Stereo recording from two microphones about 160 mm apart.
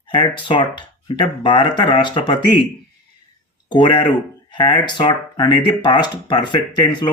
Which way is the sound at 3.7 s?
30° left (ahead or behind).